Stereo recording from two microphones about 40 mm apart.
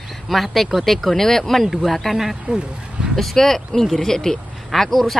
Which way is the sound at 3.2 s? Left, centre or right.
Centre.